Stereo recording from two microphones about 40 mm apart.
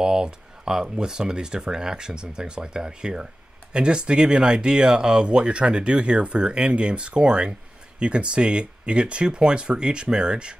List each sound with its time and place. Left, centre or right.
0.0 s speech: centre